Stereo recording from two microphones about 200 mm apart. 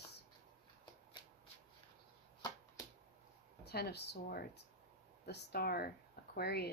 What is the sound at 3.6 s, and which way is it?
Speech, 55° left (ahead or behind).